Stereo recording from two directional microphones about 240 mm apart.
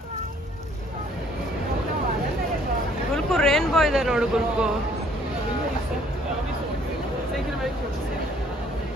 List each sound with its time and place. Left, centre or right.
3.3 s speech: centre